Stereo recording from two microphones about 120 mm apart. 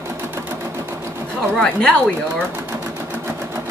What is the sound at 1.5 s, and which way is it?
Speech, 10° left (ahead or behind).